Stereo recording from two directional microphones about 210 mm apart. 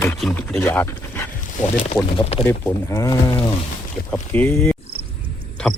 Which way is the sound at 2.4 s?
10° left (ahead or behind).